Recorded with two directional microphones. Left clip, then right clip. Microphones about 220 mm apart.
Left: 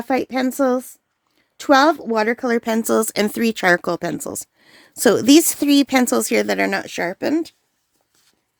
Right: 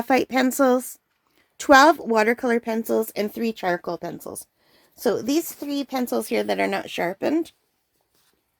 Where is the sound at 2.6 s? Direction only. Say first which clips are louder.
Left 5 dB; 35° left (ahead or behind); by 7.5 s 15° left (ahead or behind).